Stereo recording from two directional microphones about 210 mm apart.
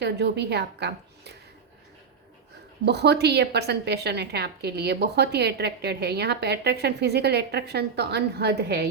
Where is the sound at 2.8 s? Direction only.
50° right (ahead or behind).